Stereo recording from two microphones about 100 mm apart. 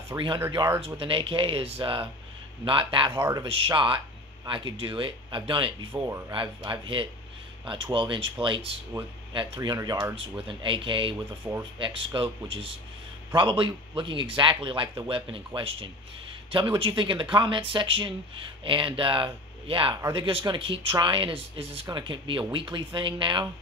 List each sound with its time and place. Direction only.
0.1 s speech: 25° right (ahead or behind)
0.7 s speech: 65° right (ahead or behind)
6.0 s speech: 30° right (ahead or behind)
6.3 s speech: 50° right (ahead or behind)
9.6 s speech: 40° right (ahead or behind)
10.6 s speech: 55° right (ahead or behind)
11.4 s speech: 30° right (ahead or behind)
11.8 s speech: 55° right (ahead or behind)